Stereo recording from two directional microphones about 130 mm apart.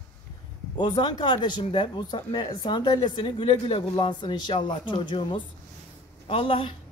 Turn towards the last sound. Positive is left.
turn(degrees=45)  # may be behind; listen again after turning